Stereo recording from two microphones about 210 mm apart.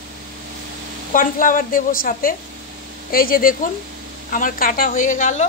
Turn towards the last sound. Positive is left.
turn(degrees=35)  # may be behind; listen again after turning